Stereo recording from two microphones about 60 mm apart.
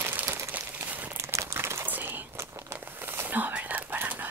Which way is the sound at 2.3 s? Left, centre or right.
Right.